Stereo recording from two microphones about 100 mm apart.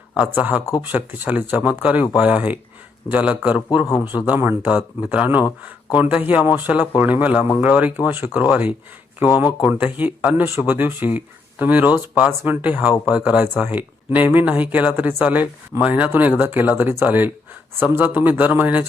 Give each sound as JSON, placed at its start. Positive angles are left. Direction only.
{"t": 0.3, "sound": "speech", "side_deg": -15}
{"t": 12.6, "sound": "speech", "side_deg": -15}